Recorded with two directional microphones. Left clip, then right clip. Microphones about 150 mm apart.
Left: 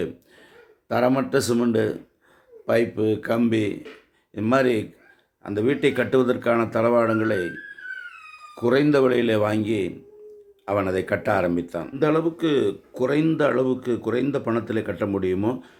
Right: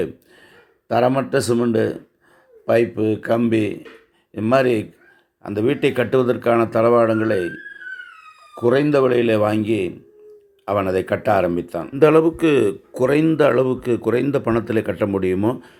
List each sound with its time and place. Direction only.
0.9 s speech: 20° right (ahead or behind)
8.5 s speech: 15° right (ahead or behind)
11.9 s speech: 50° right (ahead or behind); by 15.7 s 30° right (ahead or behind)